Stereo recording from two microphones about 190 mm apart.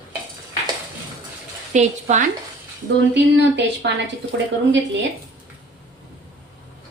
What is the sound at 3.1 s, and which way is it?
Speech, 65° right (ahead or behind).